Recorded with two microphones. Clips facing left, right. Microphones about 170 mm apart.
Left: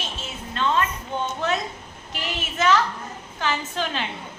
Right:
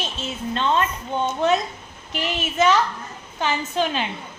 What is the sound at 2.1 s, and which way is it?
A woman's voice, 20° right (ahead or behind).